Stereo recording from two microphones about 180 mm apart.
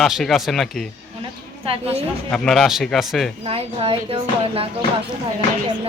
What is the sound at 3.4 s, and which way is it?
Speech, 30° right (ahead or behind).